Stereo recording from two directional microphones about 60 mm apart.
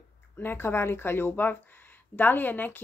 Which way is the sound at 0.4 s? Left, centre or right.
Left.